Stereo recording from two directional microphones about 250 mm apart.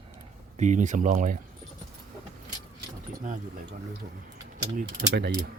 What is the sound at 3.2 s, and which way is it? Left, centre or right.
Speech, right.